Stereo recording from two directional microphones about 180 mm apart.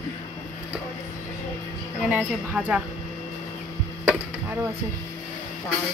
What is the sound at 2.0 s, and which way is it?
Speech, 5° right (ahead or behind).